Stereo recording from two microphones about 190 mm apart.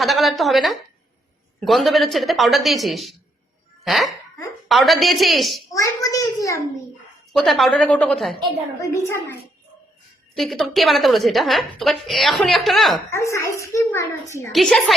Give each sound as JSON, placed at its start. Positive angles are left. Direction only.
{"t": 0.0, "sound": "a woman's voice", "side_deg": 0}
{"t": 5.7, "sound": "a child's voice", "side_deg": 20}
{"t": 7.3, "sound": "a woman's voice", "side_deg": 0}
{"t": 8.8, "sound": "a child's voice", "side_deg": 15}
{"t": 10.3, "sound": "a woman's voice", "side_deg": 0}
{"t": 13.1, "sound": "a child's voice", "side_deg": 15}
{"t": 14.5, "sound": "a woman's voice", "side_deg": 0}